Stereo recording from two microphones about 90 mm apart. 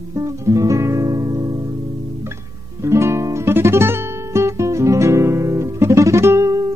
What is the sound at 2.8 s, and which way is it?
Guitar, 30° right (ahead or behind).